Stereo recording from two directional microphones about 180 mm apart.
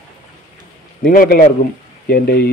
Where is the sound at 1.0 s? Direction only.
55° left (ahead or behind).